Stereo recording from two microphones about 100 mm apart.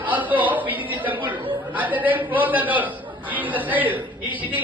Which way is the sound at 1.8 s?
15° right (ahead or behind).